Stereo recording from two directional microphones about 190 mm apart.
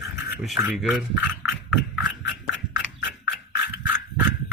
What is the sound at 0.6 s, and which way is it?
Rub, 5° right (ahead or behind).